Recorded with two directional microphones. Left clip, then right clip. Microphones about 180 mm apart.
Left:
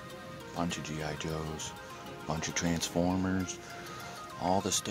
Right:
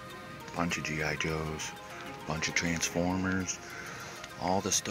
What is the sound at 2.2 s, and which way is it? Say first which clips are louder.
Speech: right 2 dB; 10° left (ahead or behind).